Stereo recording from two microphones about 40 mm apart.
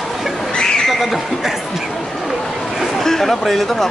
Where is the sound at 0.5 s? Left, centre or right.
Centre.